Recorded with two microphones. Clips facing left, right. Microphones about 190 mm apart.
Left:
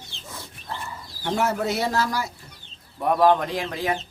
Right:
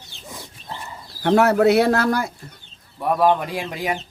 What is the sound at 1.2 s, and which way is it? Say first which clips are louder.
Speech: right 9 dB; 65° right (ahead or behind).